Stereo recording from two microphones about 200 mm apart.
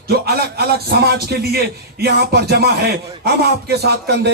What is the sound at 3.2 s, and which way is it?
A man's voice, 55° right (ahead or behind).